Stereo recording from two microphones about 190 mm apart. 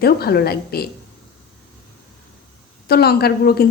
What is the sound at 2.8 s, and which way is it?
Speech, 55° left (ahead or behind).